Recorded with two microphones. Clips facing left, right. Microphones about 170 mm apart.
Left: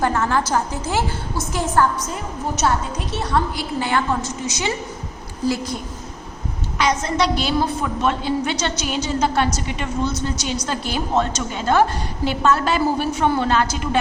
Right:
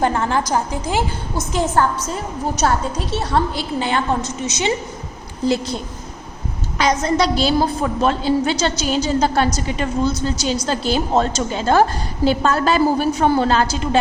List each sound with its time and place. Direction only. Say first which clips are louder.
0.0 s a woman's voice: right 1 dB; 20° right (ahead or behind)
2.6 s a woman's voice: right 2 dB; 35° right (ahead or behind)